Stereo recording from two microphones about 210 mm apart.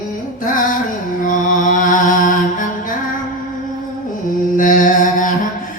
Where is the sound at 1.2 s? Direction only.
40° left (ahead or behind).